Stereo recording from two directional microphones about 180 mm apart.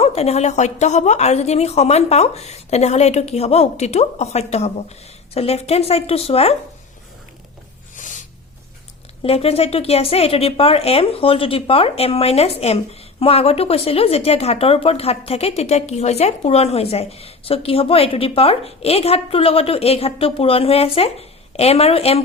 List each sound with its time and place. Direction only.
0.0 s a woman's voice: 35° left (ahead or behind)
7.9 s a sound: 45° left (ahead or behind)
9.2 s a woman's voice: 35° left (ahead or behind)